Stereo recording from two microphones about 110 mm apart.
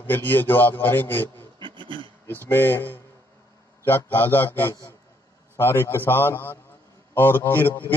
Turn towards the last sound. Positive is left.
turn(degrees=20)  # may be behind; listen again after turning